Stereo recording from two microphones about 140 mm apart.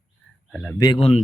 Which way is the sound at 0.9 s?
45° left (ahead or behind).